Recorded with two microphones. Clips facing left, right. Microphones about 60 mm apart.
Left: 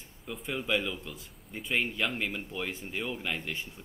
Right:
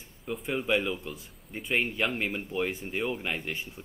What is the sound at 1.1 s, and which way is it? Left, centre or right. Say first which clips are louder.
Speech: right 2 dB; centre.